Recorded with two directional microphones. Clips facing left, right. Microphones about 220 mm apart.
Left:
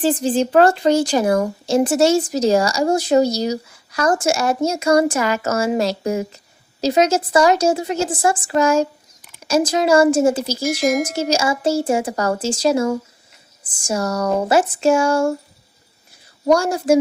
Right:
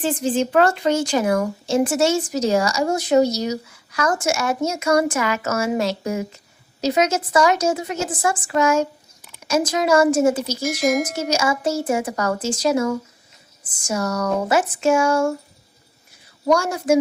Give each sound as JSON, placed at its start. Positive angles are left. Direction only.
{"t": 0.0, "sound": "speech", "side_deg": 35}
{"t": 10.6, "sound": "speech", "side_deg": 0}
{"t": 11.1, "sound": "speech", "side_deg": 30}
{"t": 16.5, "sound": "speech", "side_deg": 30}